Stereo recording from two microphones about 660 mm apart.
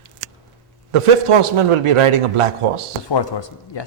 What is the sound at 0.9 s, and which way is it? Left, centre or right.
A man's voice, right.